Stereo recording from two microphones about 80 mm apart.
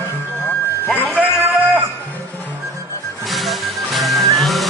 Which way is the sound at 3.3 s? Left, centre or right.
Centre.